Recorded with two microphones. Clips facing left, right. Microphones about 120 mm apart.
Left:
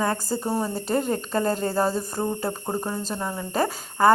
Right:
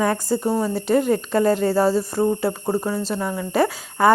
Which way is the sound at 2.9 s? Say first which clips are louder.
Right 5 dB; 20° left (ahead or behind).